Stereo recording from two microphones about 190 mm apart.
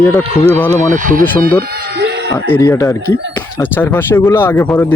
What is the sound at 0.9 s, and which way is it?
Speech, 45° right (ahead or behind).